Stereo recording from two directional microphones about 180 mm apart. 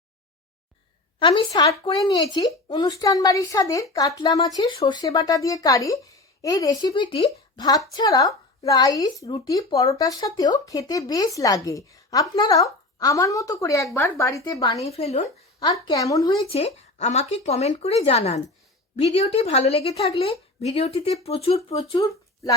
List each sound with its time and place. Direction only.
1.2 s a woman's voice: 25° left (ahead or behind)
14.8 s speech: 35° left (ahead or behind)
15.6 s a woman's voice: 20° left (ahead or behind)
16.5 s speech: 35° left (ahead or behind)